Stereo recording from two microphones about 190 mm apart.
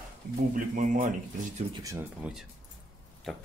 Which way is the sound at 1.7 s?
20° right (ahead or behind).